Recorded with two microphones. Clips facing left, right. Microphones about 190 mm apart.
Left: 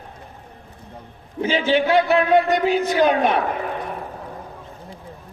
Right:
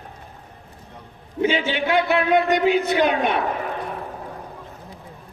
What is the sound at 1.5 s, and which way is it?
A man's voice, 35° left (ahead or behind).